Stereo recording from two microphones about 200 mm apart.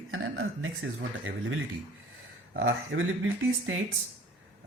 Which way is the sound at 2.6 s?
70° right (ahead or behind).